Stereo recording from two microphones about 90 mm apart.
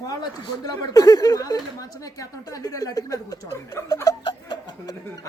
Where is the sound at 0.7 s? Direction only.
40° left (ahead or behind).